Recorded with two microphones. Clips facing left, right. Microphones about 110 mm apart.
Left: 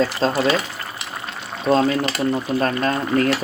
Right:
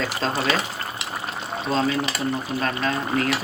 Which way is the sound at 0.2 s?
35° left (ahead or behind).